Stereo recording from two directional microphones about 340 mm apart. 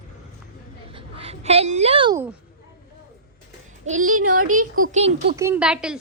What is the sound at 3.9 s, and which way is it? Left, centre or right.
Speech, right.